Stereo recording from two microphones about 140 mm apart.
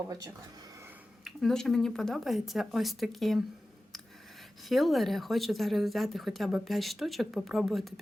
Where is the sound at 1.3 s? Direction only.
Centre (ahead or behind).